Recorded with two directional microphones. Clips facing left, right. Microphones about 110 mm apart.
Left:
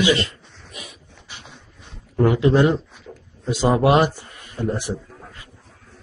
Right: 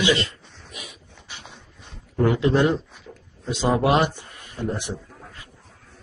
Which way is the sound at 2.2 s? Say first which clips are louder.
Left 3 dB; 5° left (ahead or behind).